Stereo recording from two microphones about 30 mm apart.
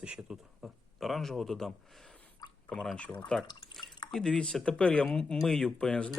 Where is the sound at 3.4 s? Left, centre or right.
Centre.